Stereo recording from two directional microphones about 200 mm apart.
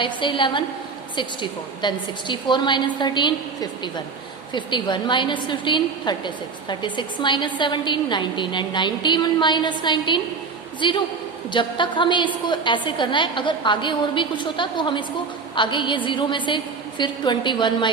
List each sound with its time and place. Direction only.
0.0 s a woman's voice: 25° left (ahead or behind)